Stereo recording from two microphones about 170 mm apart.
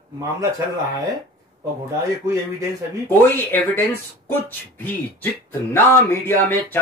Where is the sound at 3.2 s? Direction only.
10° left (ahead or behind).